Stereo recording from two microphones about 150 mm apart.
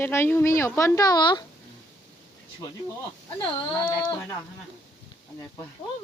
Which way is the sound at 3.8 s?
30° left (ahead or behind).